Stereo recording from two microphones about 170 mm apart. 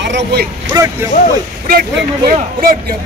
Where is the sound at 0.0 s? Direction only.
80° right.